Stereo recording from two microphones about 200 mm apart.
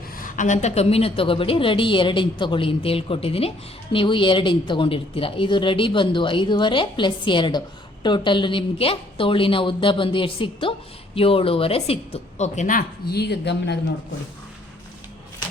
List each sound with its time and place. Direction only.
0.2 s a woman's voice: 40° left (ahead or behind); by 13.9 s 60° left (ahead or behind)